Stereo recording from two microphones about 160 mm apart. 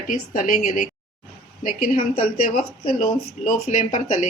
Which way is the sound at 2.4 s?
60° left (ahead or behind).